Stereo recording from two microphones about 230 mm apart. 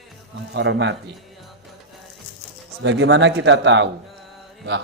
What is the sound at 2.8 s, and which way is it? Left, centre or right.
Speech, right.